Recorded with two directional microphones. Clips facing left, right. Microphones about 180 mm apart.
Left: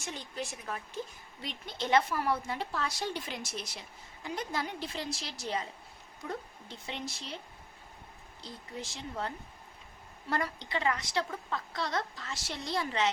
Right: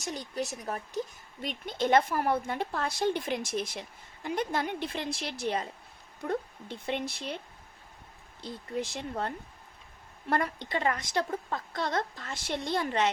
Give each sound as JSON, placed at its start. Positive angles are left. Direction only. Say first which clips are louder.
{"t": 0.3, "sound": "a woman's voice", "louder": "right 5 dB", "side_deg": -40}
{"t": 8.4, "sound": "a woman's voice", "louder": "right 8 dB", "side_deg": -55}